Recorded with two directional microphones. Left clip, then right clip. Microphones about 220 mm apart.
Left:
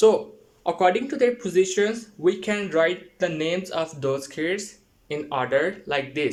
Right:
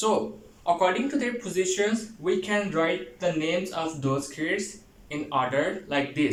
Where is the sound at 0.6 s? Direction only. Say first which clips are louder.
Left 3 dB; 50° left (ahead or behind).